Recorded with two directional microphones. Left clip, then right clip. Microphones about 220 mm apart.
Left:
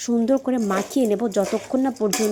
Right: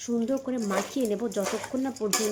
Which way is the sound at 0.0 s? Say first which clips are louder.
Left 8 dB; 35° left (ahead or behind).